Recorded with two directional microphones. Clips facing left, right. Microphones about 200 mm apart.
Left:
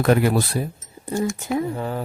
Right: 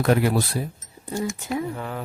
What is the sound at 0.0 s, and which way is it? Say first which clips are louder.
Speech: left 2 dB; 60° left (ahead or behind).